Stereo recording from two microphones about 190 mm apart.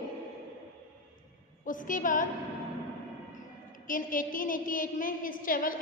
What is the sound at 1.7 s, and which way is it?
Speech, 45° left (ahead or behind).